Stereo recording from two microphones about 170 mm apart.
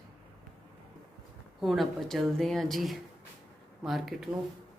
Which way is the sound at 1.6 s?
Centre (ahead or behind).